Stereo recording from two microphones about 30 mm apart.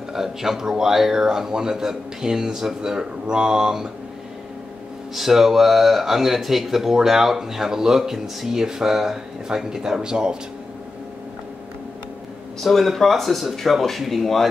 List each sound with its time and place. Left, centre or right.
0.1 s speech: centre
5.1 s speech: centre
9.5 s speech: right
12.6 s speech: centre